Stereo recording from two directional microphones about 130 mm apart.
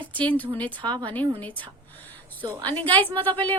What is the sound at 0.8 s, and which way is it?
Speech, 35° right (ahead or behind).